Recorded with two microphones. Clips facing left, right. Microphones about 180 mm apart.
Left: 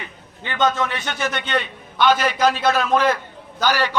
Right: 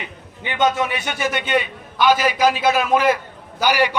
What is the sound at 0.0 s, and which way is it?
A man's voice, 15° right (ahead or behind).